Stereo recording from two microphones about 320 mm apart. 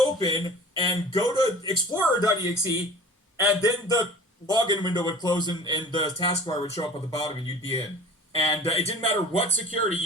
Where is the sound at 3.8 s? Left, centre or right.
Centre.